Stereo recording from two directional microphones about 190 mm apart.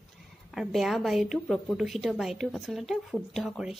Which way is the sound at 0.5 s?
Centre (ahead or behind).